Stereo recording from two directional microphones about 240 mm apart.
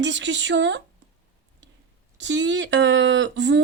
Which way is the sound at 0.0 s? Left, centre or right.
Right.